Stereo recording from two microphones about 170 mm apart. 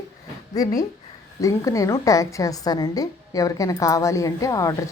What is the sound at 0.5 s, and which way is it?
A woman's voice, 20° left (ahead or behind).